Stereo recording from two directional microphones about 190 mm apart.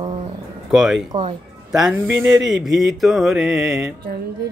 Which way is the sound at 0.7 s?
Centre (ahead or behind).